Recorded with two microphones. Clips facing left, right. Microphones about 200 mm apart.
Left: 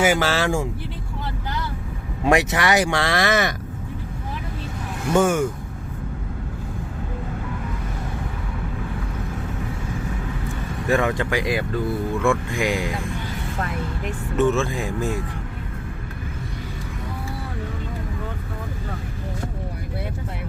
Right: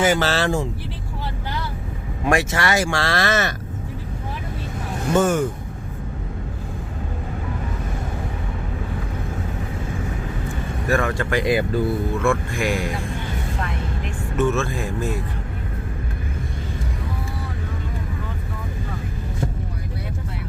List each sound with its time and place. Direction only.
0.0 s speech: 10° left (ahead or behind)
2.2 s speech: 20° left (ahead or behind)
5.2 s speech: 10° left (ahead or behind)
10.8 s speech: 15° left (ahead or behind)
11.4 s speech: 5° right (ahead or behind)
12.2 s speech: 15° left (ahead or behind)
14.3 s speech: 15° left (ahead or behind)